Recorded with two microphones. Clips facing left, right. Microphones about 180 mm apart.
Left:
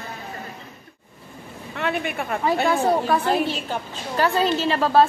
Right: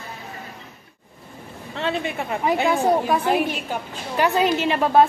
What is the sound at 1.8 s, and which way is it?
A woman's voice, 25° right (ahead or behind).